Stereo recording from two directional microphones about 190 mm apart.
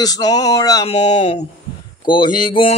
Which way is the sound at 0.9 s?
35° left (ahead or behind).